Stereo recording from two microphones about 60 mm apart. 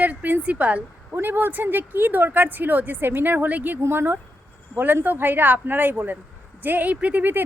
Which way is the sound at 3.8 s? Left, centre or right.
Right.